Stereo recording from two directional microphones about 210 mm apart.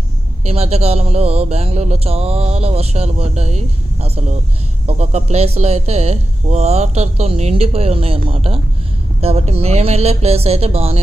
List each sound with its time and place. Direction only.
0.4 s speech: 30° right (ahead or behind)